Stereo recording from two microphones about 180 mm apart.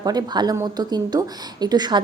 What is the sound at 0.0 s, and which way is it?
Speech, 20° right (ahead or behind).